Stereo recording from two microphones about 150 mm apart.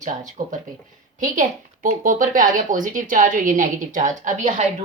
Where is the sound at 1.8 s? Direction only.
65° right (ahead or behind).